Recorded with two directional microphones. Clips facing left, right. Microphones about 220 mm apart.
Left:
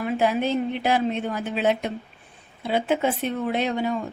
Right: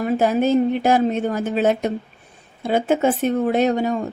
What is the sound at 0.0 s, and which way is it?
A woman's voice, 40° right (ahead or behind).